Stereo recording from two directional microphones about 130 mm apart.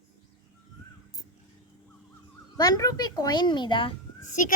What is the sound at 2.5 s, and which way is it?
A child's voice, 30° left (ahead or behind).